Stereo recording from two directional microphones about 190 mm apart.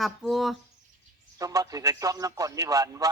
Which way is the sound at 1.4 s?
20° right (ahead or behind).